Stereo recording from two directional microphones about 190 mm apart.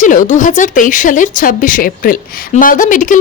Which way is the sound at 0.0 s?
40° left (ahead or behind).